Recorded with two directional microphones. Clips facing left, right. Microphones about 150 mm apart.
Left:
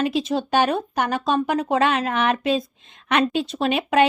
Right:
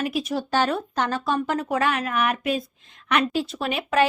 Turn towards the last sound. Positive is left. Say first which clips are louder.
# left 3 dB
turn(degrees=20)  # may be behind; listen again after turning